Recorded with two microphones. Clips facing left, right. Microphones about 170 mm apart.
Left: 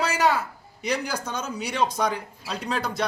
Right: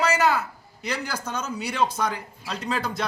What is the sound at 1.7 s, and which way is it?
Speech, 15° left (ahead or behind).